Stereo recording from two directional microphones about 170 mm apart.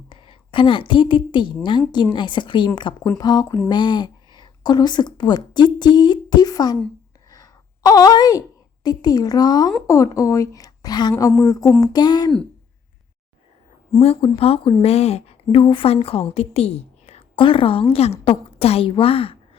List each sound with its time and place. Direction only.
0.1 s a woman's voice: 30° left (ahead or behind)
14.0 s a woman's voice: 35° left (ahead or behind)